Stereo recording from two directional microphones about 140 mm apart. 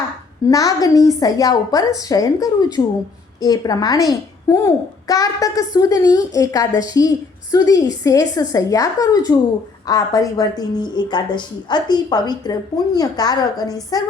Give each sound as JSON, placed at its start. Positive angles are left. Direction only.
{"t": 0.4, "sound": "a child's voice", "side_deg": 25}